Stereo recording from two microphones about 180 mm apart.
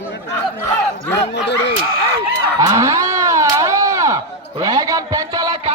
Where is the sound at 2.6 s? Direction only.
15° right (ahead or behind).